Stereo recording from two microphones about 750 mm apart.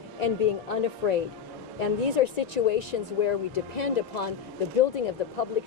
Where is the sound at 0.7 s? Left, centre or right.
Left.